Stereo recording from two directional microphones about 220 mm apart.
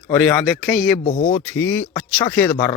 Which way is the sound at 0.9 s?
30° left (ahead or behind).